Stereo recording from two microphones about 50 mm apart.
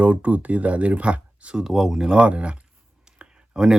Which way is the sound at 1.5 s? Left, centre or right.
Centre.